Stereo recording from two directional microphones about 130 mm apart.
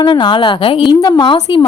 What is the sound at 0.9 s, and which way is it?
Speech, 30° left (ahead or behind).